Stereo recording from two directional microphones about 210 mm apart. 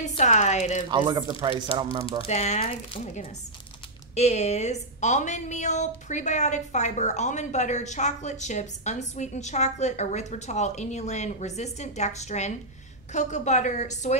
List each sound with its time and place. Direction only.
0.0 s a woman's voice: 35° left (ahead or behind)
0.8 s speech: 20° right (ahead or behind)
2.2 s a woman's voice: 30° left (ahead or behind)